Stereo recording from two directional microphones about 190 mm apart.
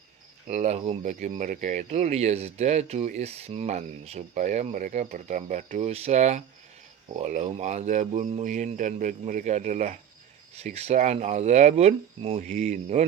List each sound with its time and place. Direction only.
0.4 s speech: 40° right (ahead or behind)